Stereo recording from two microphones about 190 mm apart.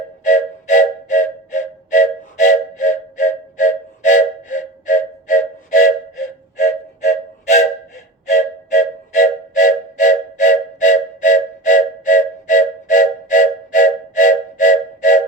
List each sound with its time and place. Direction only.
0.3 s music: 40° left (ahead or behind)